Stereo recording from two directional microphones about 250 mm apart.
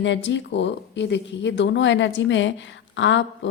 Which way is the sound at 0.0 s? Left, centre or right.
Left.